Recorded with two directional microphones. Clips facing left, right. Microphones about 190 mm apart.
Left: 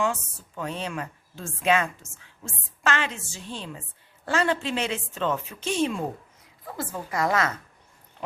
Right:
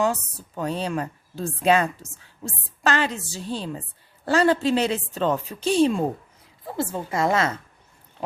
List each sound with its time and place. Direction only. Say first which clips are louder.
0.0 s a woman's voice: right 4 dB; 40° right (ahead or behind)